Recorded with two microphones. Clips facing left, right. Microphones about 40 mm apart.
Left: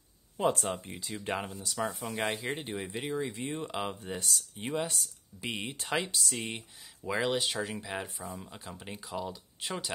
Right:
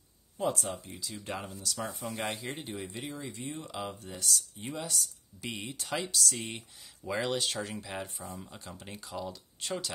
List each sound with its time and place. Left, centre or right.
0.4 s speech: left
1.8 s speech: centre
2.5 s speech: left
6.2 s speech: centre